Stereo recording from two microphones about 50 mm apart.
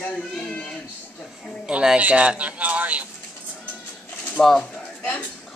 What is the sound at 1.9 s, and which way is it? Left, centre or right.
Speech, right.